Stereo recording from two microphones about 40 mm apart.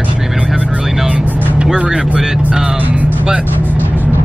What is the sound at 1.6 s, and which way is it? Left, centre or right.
Speech, right.